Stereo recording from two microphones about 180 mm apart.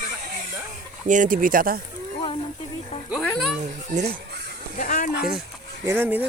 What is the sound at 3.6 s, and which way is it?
Speech, 40° right (ahead or behind).